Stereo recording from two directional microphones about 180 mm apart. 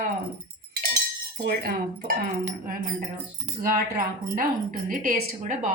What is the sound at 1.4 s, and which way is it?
Speech, 50° right (ahead or behind).